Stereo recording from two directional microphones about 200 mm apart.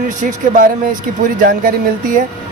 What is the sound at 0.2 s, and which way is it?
Speech, 40° right (ahead or behind).